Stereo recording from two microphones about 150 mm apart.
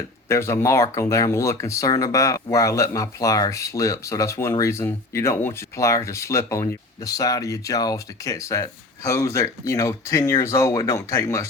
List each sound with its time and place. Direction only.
0.3 s speech: 20° left (ahead or behind)